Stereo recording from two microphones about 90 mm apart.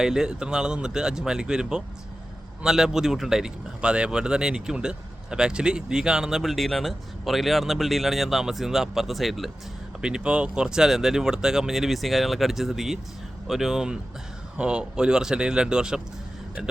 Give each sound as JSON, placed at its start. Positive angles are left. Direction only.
{"t": 0.0, "sound": "speech", "side_deg": -5}